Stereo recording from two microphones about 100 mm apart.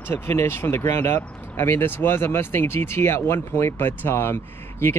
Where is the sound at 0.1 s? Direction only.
25° left (ahead or behind).